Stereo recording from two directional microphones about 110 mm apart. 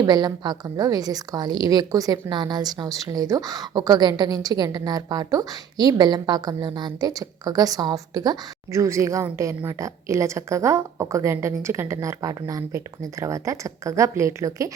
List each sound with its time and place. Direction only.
0.0 s a woman's voice: 35° right (ahead or behind)